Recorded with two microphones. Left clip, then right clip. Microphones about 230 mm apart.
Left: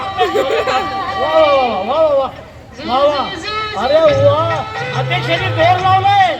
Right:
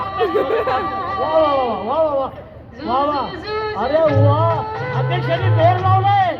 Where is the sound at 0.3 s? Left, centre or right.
Centre.